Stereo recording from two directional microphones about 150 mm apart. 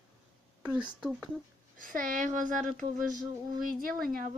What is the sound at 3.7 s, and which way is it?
Speech, 70° right (ahead or behind).